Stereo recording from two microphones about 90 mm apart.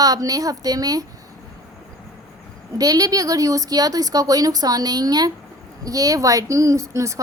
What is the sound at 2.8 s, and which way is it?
A woman's voice, 40° right (ahead or behind).